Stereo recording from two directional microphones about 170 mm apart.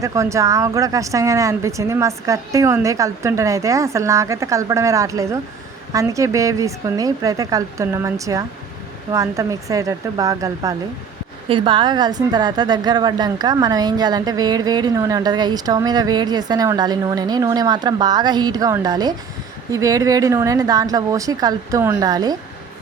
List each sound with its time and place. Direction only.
0.0 s a woman's voice: 15° right (ahead or behind)
11.4 s a woman's voice: 30° right (ahead or behind)